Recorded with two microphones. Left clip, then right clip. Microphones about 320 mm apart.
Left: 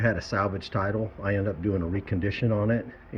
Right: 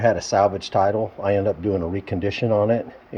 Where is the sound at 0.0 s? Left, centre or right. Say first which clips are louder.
Right 9 dB; centre.